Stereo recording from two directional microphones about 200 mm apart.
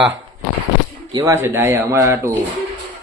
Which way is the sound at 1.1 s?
15° right (ahead or behind).